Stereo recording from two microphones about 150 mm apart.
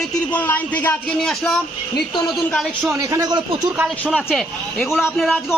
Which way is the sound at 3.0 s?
20° right (ahead or behind).